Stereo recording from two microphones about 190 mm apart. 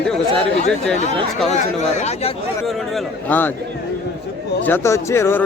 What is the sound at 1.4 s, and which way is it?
Speech, 35° left (ahead or behind).